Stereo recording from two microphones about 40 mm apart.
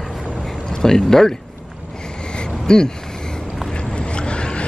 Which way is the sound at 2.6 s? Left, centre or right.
Centre.